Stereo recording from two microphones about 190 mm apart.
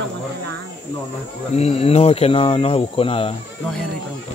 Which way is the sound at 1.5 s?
35° left (ahead or behind).